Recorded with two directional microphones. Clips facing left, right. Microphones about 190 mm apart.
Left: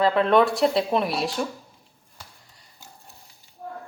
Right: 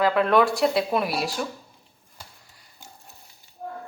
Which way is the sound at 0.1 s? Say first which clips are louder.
Left 1 dB; 5° right (ahead or behind).